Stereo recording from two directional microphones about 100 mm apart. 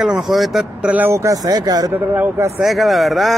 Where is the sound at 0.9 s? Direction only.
25° right (ahead or behind).